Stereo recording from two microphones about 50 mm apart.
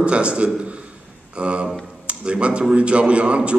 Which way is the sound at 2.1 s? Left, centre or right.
Right.